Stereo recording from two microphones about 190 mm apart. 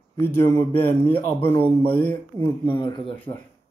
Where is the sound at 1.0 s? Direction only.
25° left (ahead or behind).